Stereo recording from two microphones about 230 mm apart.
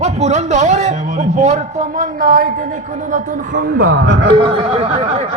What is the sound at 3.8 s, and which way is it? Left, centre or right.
Speech, right.